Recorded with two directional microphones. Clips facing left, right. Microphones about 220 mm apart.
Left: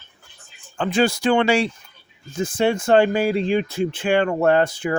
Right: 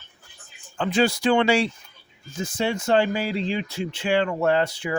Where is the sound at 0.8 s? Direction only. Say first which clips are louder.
Left 2 dB; 50° left (ahead or behind).